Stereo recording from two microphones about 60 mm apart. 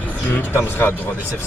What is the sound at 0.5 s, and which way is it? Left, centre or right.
Speech, left.